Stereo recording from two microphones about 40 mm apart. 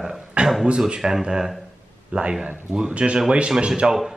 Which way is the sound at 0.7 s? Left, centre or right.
Right.